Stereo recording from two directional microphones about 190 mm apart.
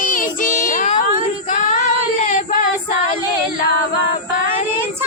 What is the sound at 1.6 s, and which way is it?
Female singing, 45° left (ahead or behind).